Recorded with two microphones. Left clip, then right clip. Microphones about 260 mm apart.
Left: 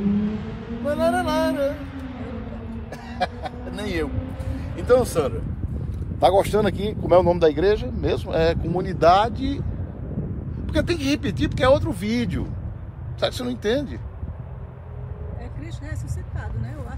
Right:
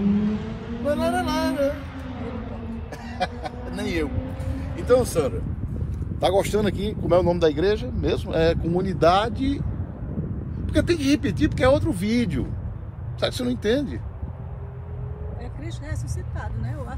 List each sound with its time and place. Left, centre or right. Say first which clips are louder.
0.8 s a sound: left 2 dB; centre
3.2 s speech: left 2 dB; centre
10.7 s speech: right 1 dB; left